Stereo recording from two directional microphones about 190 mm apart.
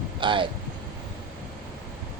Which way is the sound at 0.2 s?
25° right (ahead or behind).